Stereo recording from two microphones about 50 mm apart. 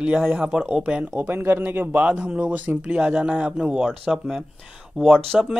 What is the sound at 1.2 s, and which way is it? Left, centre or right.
A man's voice, right.